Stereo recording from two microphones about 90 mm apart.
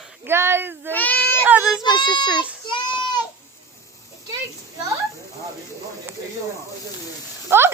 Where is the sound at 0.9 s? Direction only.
20° left (ahead or behind).